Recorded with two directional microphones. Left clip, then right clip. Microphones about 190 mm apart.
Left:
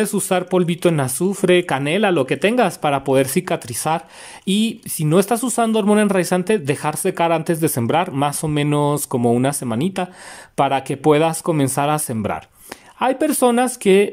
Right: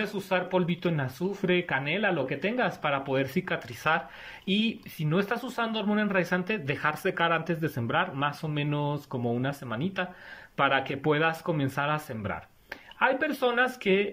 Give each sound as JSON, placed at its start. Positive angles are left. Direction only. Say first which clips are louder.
{"t": 0.0, "sound": "speech", "louder": "left 9 dB", "side_deg": 40}